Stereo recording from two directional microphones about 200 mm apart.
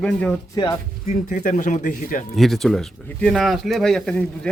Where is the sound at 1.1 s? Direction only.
40° left (ahead or behind).